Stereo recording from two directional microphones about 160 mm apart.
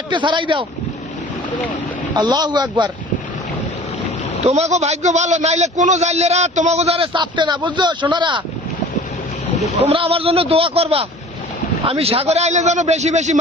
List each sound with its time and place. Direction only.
0.1 s a man's voice: 30° right (ahead or behind)
2.1 s a man's voice: 25° right (ahead or behind)
4.4 s a man's voice: 45° right (ahead or behind)
9.8 s a man's voice: 35° right (ahead or behind)